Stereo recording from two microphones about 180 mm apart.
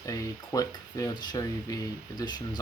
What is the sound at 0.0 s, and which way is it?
Speech, 20° left (ahead or behind).